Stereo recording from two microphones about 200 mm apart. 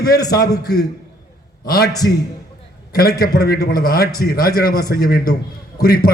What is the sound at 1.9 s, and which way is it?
Speech, 20° left (ahead or behind).